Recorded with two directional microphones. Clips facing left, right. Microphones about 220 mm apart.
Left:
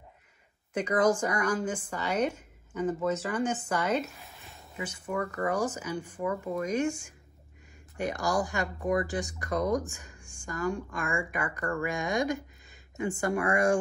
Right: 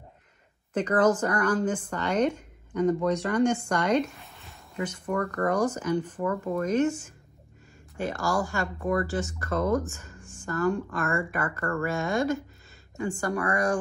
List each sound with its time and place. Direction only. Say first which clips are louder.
0.7 s speech: right 3 dB; 10° left (ahead or behind); by 13.7 s 25° left (ahead or behind)